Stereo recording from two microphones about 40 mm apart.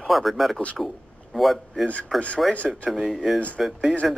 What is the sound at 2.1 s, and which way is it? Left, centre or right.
Speech, left.